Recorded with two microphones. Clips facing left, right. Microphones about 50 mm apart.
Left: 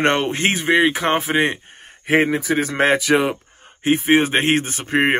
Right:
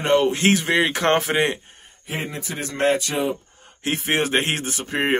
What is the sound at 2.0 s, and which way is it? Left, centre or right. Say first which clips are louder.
Speech: left 12 dB; left.